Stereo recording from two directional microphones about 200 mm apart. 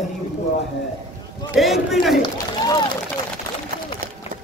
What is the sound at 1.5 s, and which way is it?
Speech, centre (ahead or behind).